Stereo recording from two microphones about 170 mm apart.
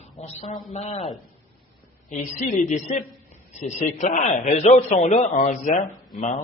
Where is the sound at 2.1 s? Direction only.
50° left (ahead or behind).